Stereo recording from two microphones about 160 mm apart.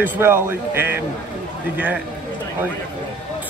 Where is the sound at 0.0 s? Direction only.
15° right (ahead or behind).